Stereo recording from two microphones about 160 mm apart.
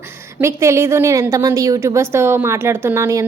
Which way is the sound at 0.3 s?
15° right (ahead or behind).